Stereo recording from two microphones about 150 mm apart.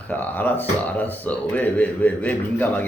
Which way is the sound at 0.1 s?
10° left (ahead or behind).